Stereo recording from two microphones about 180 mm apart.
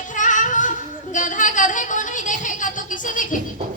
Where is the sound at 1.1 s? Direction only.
45° left (ahead or behind).